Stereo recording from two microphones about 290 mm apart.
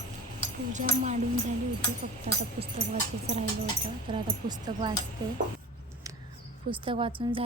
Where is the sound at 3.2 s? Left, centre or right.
Right.